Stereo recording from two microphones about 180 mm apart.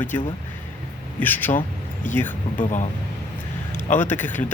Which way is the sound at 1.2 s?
10° left (ahead or behind).